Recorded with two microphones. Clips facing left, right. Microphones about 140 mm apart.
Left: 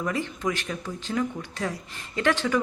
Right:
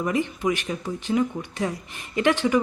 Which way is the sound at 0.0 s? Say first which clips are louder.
Right 4 dB; 15° right (ahead or behind).